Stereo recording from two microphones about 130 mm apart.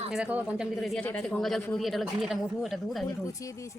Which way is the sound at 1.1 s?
15° left (ahead or behind).